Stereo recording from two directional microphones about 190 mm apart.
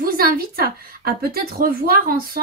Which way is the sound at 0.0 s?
50° right (ahead or behind).